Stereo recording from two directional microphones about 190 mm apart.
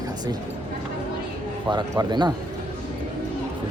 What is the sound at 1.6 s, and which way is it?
Speech, 25° right (ahead or behind).